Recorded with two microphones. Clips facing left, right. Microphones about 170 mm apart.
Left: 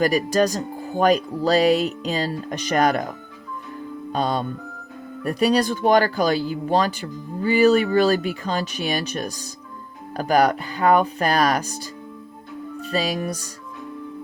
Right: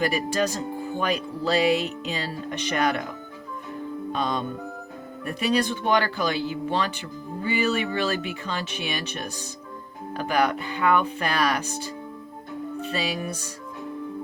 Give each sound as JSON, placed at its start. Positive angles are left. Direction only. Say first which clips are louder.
{"t": 0.0, "sound": "speech", "louder": "left 5 dB", "side_deg": 40}
{"t": 4.1, "sound": "speech", "louder": "left 5 dB", "side_deg": 35}